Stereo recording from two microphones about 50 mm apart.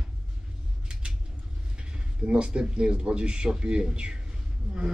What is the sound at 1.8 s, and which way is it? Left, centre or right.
Speech, centre.